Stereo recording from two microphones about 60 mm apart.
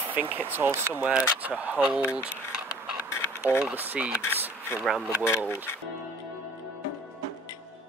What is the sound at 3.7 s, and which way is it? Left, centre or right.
Speech, right.